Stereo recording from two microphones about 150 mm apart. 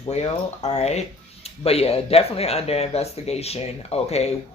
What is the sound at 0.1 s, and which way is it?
Speech, 50° left (ahead or behind).